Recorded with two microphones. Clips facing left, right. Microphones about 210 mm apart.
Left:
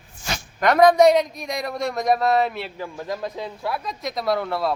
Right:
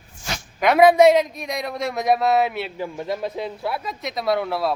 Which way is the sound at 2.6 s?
20° right (ahead or behind).